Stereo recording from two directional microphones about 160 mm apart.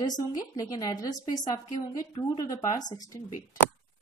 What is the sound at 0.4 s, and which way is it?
A woman's voice, 20° left (ahead or behind).